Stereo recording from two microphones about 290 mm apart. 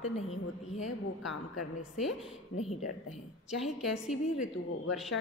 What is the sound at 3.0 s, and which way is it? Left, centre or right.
A woman's voice, centre.